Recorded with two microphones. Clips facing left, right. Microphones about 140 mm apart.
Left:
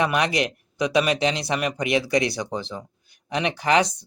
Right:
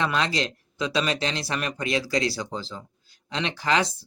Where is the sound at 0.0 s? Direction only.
15° left (ahead or behind).